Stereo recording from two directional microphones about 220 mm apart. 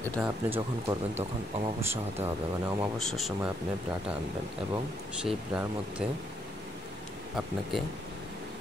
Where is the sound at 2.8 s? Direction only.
Centre (ahead or behind).